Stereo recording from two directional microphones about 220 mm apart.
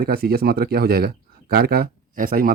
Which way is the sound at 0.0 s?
45° right (ahead or behind).